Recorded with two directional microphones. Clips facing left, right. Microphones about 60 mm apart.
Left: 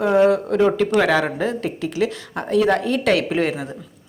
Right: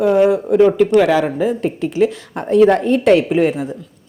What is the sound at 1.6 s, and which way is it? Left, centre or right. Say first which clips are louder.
A woman's voice: right 6 dB; right.